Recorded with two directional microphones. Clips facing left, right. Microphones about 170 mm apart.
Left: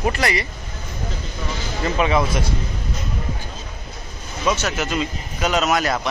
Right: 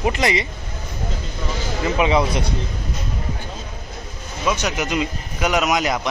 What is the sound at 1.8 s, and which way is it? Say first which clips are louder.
Speech: right 1 dB; 15° right (ahead or behind).